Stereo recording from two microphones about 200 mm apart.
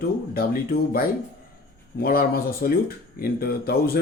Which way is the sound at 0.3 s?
45° left (ahead or behind).